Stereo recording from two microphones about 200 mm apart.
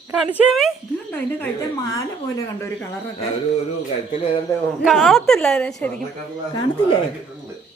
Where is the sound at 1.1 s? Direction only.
15° left (ahead or behind).